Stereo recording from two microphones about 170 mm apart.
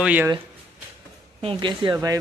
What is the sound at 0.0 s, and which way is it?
Speech, 10° right (ahead or behind).